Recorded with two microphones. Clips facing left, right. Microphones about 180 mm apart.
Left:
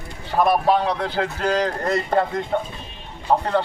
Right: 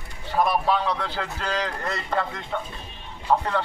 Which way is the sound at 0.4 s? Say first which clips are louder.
Left 4 dB; 45° left (ahead or behind).